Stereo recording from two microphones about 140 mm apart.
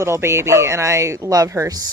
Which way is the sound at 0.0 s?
20° right (ahead or behind).